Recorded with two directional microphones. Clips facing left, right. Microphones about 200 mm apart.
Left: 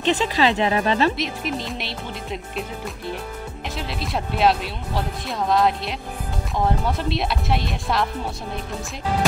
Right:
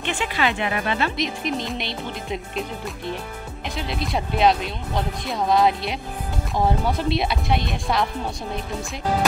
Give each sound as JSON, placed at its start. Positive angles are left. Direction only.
{"t": 0.1, "sound": "speech", "side_deg": 35}
{"t": 1.1, "sound": "speech", "side_deg": 0}
{"t": 3.7, "sound": "speech", "side_deg": 0}